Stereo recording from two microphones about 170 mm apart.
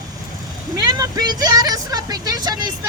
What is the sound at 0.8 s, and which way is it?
Speech, 20° right (ahead or behind).